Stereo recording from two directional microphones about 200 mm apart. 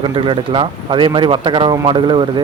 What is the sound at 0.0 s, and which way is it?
Speech, 25° right (ahead or behind).